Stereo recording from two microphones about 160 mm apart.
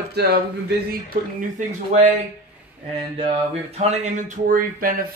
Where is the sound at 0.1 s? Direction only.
85° right.